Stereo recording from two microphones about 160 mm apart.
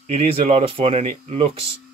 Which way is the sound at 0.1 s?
40° right (ahead or behind).